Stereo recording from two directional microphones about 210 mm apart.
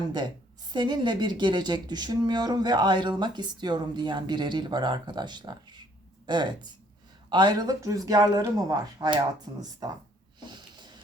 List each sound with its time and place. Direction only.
0.7 s a woman's voice: 20° right (ahead or behind)